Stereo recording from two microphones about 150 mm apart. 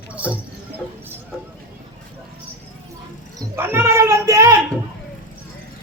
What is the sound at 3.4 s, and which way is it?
Children playing, 15° right (ahead or behind).